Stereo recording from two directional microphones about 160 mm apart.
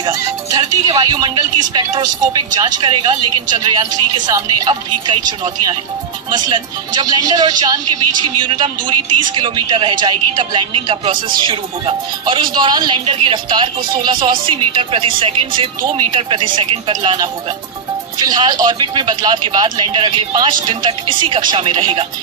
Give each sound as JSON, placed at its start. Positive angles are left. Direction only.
{"t": 0.0, "sound": "speech", "side_deg": -25}